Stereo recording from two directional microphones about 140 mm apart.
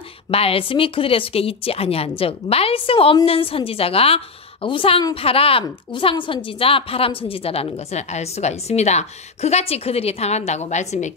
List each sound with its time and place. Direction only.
0.3 s a woman's voice: 45° left (ahead or behind)